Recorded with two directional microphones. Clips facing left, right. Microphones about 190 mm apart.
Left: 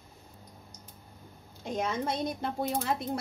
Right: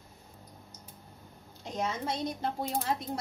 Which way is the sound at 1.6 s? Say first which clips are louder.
Left 3 dB; 55° left (ahead or behind).